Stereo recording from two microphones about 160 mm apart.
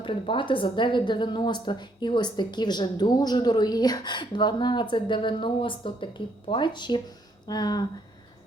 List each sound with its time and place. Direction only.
0.0 s a woman's voice: 30° left (ahead or behind)